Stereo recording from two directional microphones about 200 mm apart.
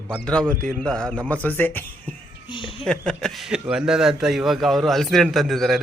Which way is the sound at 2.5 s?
25° left (ahead or behind).